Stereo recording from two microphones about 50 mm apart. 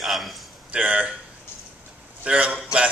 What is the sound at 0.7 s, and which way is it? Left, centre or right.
Speech, right.